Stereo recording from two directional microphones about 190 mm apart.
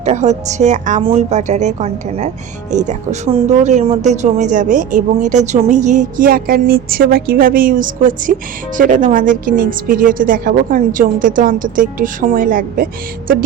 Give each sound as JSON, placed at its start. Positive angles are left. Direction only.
{"t": 0.0, "sound": "a woman's voice", "side_deg": -35}